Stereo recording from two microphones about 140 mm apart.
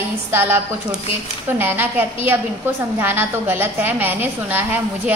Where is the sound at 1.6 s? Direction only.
15° right (ahead or behind).